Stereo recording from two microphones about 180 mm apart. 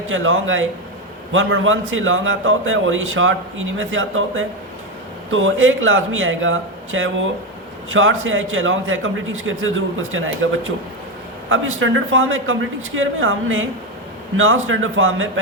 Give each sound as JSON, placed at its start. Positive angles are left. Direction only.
{"t": 0.1, "sound": "a man's voice", "side_deg": -90}